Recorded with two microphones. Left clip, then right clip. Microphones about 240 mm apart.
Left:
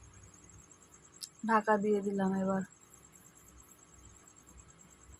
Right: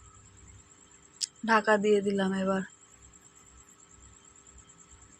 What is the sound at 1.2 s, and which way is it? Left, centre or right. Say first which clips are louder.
Speech: right 5 dB; centre.